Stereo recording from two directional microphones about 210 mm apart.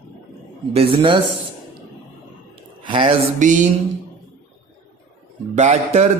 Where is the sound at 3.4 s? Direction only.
35° right (ahead or behind).